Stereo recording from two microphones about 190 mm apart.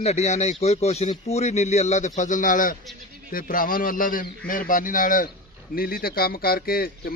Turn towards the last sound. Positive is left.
turn(degrees=50)  # may be behind; listen again after turning